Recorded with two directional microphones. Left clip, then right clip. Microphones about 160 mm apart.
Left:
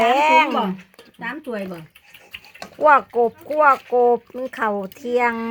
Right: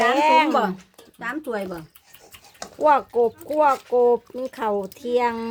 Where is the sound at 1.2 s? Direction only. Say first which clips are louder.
Right 1 dB; 25° right (ahead or behind).